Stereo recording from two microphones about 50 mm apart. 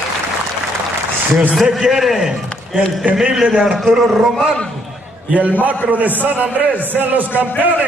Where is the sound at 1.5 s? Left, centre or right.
Centre.